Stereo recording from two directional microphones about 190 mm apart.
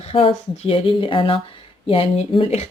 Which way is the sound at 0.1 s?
30° left (ahead or behind).